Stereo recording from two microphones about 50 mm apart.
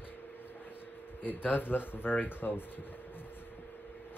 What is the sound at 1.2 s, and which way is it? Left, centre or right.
Speech, left.